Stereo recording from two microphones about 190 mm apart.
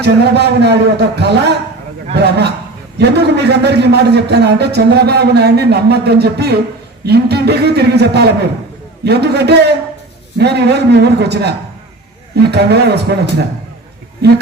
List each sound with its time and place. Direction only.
0.0 s a man's voice: 60° right (ahead or behind)
14.2 s a man's voice: 60° right (ahead or behind)